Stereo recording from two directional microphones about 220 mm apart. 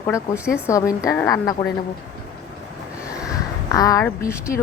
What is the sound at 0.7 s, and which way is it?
A woman's voice, 15° left (ahead or behind).